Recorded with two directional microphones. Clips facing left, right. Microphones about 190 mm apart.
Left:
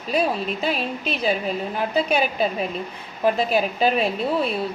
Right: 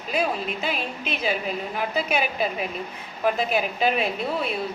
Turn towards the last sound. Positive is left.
turn(degrees=35)  # may be behind; listen again after turning